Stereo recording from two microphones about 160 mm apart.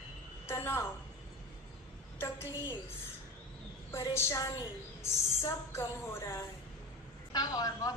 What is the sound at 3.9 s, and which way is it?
A woman's voice, 15° left (ahead or behind).